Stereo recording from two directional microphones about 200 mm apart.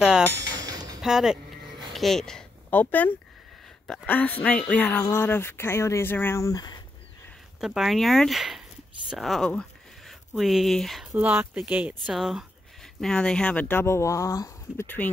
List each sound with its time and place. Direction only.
0.3 s music: 15° right (ahead or behind)
1.0 s speech: centre (ahead or behind); by 6.8 s 20° left (ahead or behind)
7.6 s speech: centre (ahead or behind)